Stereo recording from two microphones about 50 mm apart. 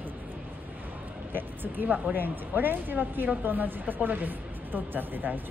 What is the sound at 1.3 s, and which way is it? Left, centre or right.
A woman's voice, right.